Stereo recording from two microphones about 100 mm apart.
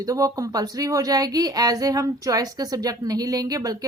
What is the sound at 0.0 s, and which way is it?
Speech, 35° right (ahead or behind).